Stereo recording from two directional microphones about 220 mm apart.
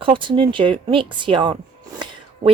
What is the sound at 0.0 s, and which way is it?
Speech, 20° right (ahead or behind).